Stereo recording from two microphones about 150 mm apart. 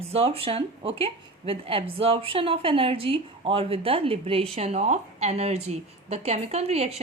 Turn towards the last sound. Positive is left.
turn(degrees=-45)  # may be behind; listen again after turning